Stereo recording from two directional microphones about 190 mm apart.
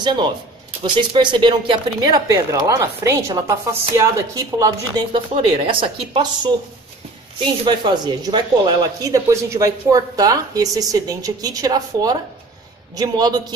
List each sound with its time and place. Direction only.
0.0 s speech: 25° right (ahead or behind)
5.1 s speech: 25° right (ahead or behind)